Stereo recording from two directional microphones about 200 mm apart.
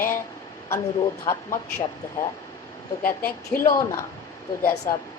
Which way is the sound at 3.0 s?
45° left (ahead or behind).